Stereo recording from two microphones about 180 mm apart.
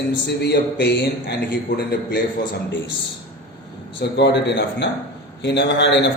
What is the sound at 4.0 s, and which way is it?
A man's voice, 70° left (ahead or behind).